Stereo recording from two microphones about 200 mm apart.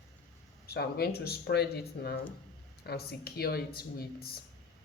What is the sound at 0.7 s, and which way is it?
Speech, 55° left (ahead or behind).